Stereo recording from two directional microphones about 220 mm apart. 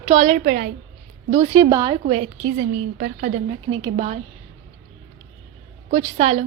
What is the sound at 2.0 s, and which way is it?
A woman's voice, 35° right (ahead or behind).